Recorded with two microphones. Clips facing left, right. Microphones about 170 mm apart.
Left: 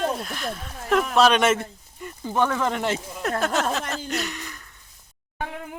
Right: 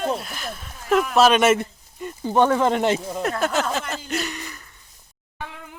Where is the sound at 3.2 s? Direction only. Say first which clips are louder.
Right 1 dB; centre (ahead or behind).